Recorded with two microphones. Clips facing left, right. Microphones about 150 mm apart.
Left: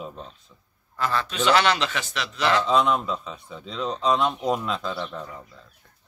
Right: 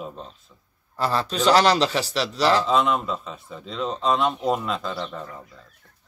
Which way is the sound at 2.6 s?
Centre (ahead or behind).